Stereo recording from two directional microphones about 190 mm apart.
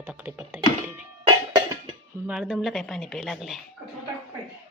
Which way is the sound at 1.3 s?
20° right (ahead or behind).